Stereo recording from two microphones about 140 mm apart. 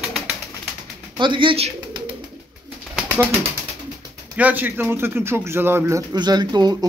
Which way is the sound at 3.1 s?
15° right (ahead or behind).